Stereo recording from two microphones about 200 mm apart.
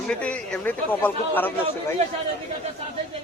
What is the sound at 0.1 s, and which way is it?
A man's voice, 5° left (ahead or behind).